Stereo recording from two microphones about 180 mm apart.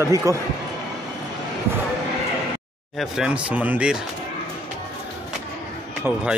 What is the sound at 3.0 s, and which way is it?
Speech, 5° right (ahead or behind).